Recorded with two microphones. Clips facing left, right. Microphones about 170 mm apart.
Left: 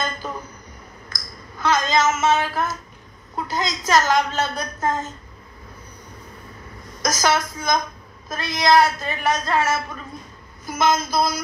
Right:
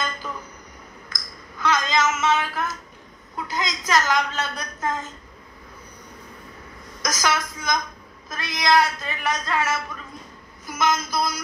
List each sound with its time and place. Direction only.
1.6 s a sound: 30° left (ahead or behind)
3.3 s a woman's voice: 30° left (ahead or behind)
7.0 s a woman's voice: 30° left (ahead or behind)